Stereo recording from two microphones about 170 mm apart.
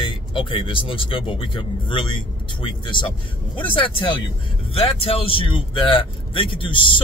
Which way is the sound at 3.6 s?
30° left (ahead or behind).